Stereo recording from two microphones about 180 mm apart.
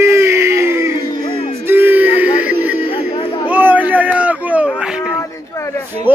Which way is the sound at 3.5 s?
10° right (ahead or behind).